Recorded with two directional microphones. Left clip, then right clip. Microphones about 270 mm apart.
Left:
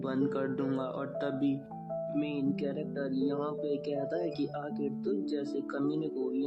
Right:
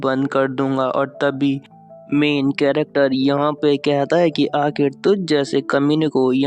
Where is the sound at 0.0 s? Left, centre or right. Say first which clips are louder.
Right 14 dB; right.